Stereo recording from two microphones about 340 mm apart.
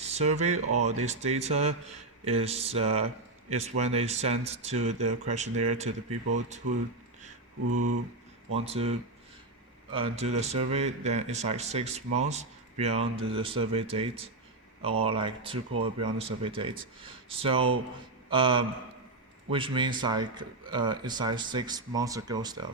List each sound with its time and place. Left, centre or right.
0.0 s speech: centre
0.6 s speech: right
0.9 s speech: centre
7.6 s speech: right
8.5 s speech: centre